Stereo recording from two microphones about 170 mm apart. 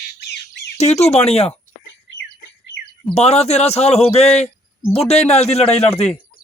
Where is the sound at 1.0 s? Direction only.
35° left (ahead or behind).